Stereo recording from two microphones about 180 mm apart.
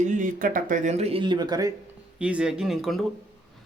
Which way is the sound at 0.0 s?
45° right (ahead or behind).